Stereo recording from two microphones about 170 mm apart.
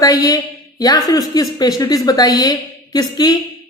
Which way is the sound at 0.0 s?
20° left (ahead or behind).